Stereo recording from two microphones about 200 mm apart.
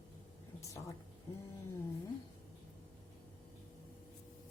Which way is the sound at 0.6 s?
15° left (ahead or behind).